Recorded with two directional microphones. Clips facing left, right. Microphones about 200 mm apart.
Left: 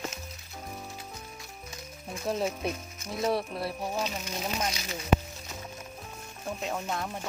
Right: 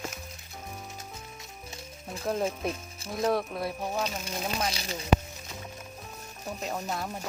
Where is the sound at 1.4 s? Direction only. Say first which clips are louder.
Even; 25° right (ahead or behind).